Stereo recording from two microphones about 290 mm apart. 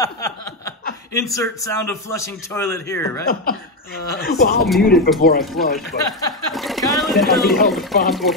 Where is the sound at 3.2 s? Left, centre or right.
Left.